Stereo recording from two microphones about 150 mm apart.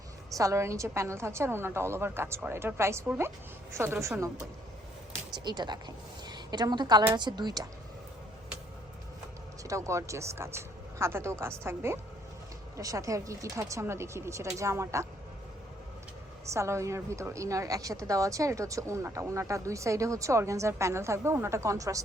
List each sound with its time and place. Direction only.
0.3 s a woman's voice: 20° right (ahead or behind)
5.4 s a woman's voice: 30° right (ahead or behind)
9.6 s a woman's voice: 20° right (ahead or behind)
16.5 s a woman's voice: 20° right (ahead or behind)